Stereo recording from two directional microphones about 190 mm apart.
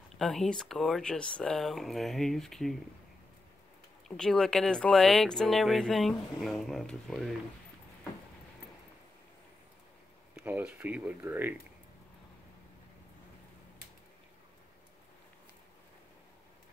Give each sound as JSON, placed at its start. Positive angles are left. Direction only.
{"t": 0.2, "sound": "speech", "side_deg": 0}
{"t": 4.2, "sound": "speech", "side_deg": 5}
{"t": 10.3, "sound": "speech", "side_deg": -5}